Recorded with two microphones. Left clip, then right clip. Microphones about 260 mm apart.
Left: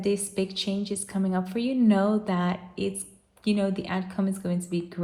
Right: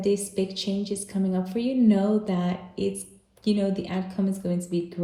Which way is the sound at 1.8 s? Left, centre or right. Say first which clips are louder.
Even; centre.